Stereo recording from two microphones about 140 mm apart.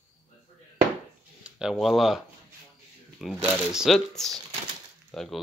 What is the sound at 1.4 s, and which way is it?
Speech, 5° right (ahead or behind).